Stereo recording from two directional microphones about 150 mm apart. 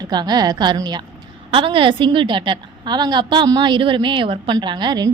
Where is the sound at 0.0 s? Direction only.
30° right (ahead or behind).